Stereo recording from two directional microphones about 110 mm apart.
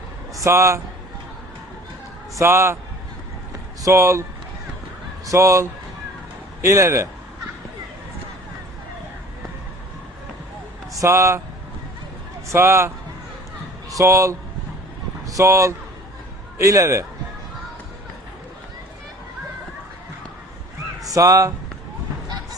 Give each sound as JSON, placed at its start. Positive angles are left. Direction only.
{"t": 0.3, "sound": "a man's voice", "side_deg": -25}
{"t": 2.3, "sound": "a man's voice", "side_deg": -25}
{"t": 3.8, "sound": "a man's voice", "side_deg": -25}
{"t": 10.9, "sound": "speech", "side_deg": -25}
{"t": 12.5, "sound": "a man's voice", "side_deg": -25}
{"t": 13.9, "sound": "a man's voice", "side_deg": -25}
{"t": 21.0, "sound": "speech", "side_deg": -30}